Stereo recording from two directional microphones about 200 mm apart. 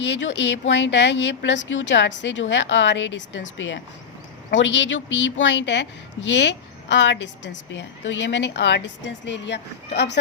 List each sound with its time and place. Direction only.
0.0 s a woman's voice: 65° left (ahead or behind)